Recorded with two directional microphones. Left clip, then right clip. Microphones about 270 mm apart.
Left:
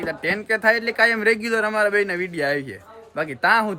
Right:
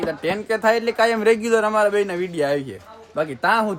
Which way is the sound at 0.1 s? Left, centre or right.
Centre.